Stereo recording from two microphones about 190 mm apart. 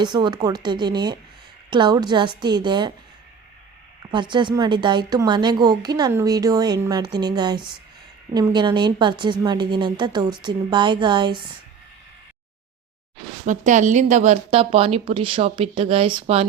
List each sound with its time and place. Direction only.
0.0 s a woman's voice: 25° right (ahead or behind)
4.1 s a woman's voice: 25° right (ahead or behind)
13.4 s a woman's voice: 40° right (ahead or behind)